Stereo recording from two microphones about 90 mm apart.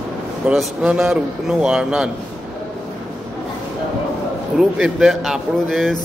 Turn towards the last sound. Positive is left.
turn(degrees=5)  # may be behind; listen again after turning